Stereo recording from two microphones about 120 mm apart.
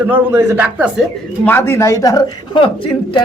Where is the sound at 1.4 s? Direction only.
20° left (ahead or behind).